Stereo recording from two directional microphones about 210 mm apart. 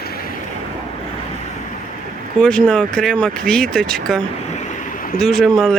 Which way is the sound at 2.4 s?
5° left (ahead or behind).